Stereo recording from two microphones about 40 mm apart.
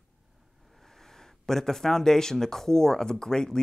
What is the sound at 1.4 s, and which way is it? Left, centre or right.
Speech, centre.